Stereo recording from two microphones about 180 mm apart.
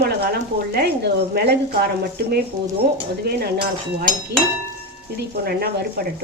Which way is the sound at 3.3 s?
65° right (ahead or behind).